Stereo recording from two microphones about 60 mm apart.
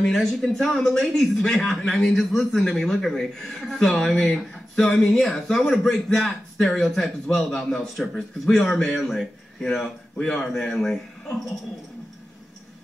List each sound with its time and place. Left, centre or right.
0.0 s a man's voice: centre